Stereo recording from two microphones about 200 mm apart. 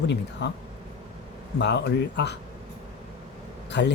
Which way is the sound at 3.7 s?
60° left (ahead or behind).